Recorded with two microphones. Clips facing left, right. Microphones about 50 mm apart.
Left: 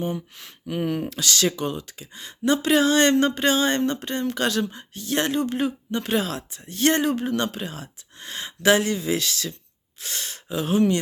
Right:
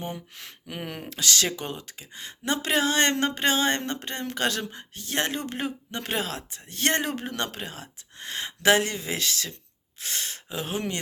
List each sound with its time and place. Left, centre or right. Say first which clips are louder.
0.0 s speech: left 7 dB; right
1.1 s speech: left 3 dB; right